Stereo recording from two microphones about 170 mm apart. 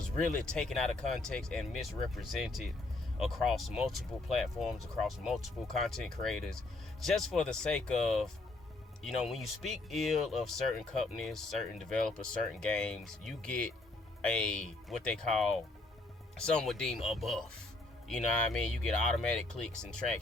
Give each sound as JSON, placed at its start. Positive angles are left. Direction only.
{"t": 0.4, "sound": "speech", "side_deg": 5}